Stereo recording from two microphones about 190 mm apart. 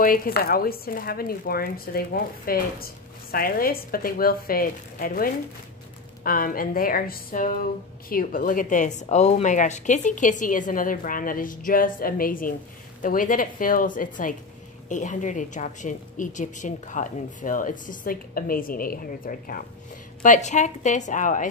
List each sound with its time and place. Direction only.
0.0 s a woman's voice: 50° left (ahead or behind)